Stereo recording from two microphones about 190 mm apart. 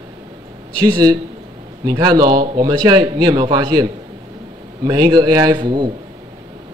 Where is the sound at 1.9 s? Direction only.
20° right (ahead or behind).